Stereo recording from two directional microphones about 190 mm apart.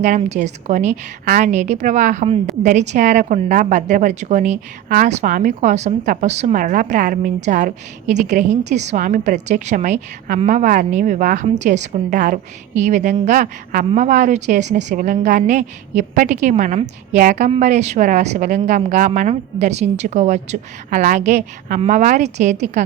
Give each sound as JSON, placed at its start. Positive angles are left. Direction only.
{"t": 0.0, "sound": "a woman's voice", "side_deg": -40}